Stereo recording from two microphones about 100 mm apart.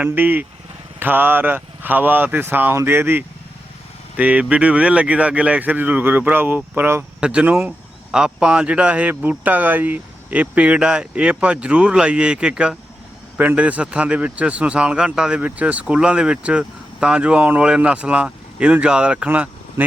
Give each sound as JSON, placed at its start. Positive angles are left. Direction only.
{"t": 0.0, "sound": "a man's voice", "side_deg": -15}
{"t": 7.2, "sound": "a man's voice", "side_deg": -10}